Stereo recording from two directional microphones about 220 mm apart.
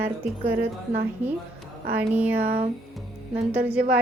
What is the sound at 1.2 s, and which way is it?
Speech, 30° right (ahead or behind).